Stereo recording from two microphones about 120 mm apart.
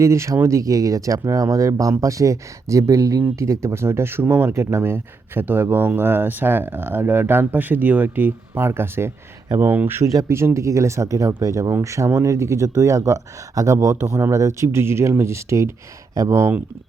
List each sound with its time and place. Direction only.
0.0 s speech: 25° right (ahead or behind)